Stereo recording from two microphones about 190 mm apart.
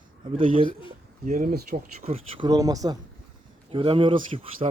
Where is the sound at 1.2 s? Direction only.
45° right (ahead or behind).